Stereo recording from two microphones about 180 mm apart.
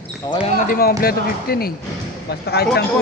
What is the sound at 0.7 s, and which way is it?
Speech, 55° left (ahead or behind).